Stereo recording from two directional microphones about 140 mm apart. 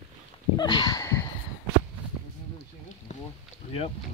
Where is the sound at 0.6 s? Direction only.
30° left (ahead or behind).